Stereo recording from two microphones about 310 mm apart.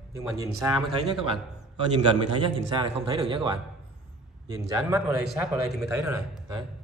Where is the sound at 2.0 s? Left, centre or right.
Centre.